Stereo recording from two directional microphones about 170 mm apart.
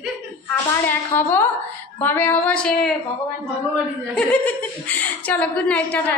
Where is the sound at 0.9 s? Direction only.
10° left (ahead or behind).